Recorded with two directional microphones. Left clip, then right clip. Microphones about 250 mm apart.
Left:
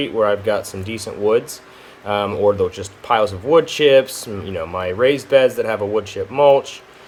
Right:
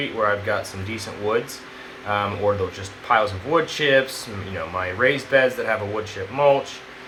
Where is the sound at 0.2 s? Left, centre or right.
Left.